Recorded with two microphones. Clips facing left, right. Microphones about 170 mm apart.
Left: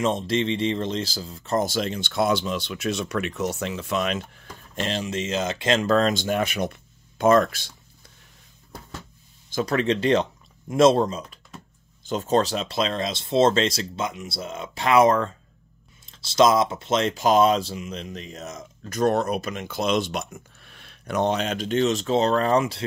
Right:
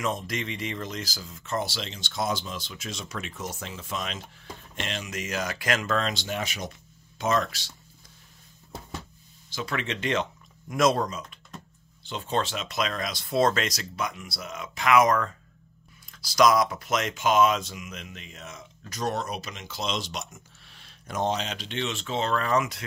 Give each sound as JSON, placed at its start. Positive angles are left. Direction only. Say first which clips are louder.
{"t": 0.0, "sound": "speech", "louder": "left 7 dB", "side_deg": 30}
{"t": 4.7, "sound": "speech", "louder": "left 7 dB", "side_deg": 35}
{"t": 9.5, "sound": "speech", "louder": "left 9 dB", "side_deg": 45}
{"t": 12.0, "sound": "speech", "louder": "left 7 dB", "side_deg": 45}